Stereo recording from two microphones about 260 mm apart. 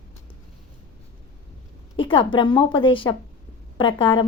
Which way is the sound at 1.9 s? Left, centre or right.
Centre.